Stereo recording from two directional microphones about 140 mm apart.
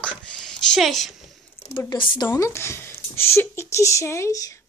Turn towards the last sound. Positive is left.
turn(degrees=25)  # may be behind; listen again after turning